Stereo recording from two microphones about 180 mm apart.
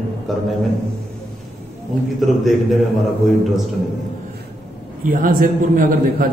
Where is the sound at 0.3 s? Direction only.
Centre (ahead or behind).